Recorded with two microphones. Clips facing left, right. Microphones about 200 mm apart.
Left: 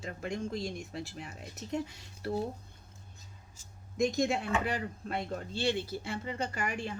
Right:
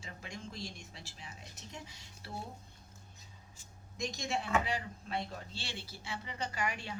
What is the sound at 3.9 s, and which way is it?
Speech, 55° left (ahead or behind).